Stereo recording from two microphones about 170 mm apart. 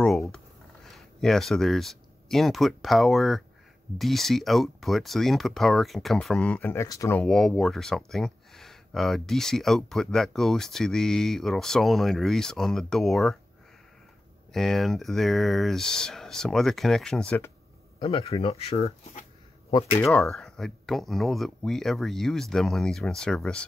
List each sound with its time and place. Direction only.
0.0 s speech: 5° left (ahead or behind)
6.5 s speech: 15° left (ahead or behind)
14.5 s speech: centre (ahead or behind)
17.9 s speech: 35° left (ahead or behind)
20.0 s speech: centre (ahead or behind)